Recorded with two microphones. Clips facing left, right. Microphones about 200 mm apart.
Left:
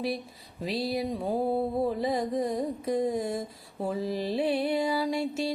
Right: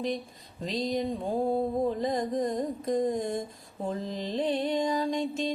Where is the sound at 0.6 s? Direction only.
5° left (ahead or behind).